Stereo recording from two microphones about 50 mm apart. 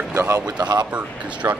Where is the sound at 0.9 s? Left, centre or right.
Right.